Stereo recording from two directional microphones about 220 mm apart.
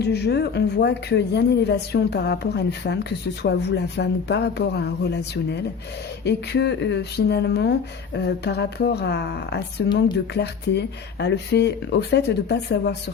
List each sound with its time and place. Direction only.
0.0 s a woman's voice: 50° left (ahead or behind)